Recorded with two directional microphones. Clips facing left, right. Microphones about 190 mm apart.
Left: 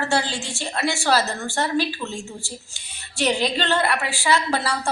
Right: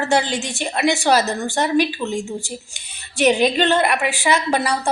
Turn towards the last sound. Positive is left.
turn(degrees=-20)  # may be behind; listen again after turning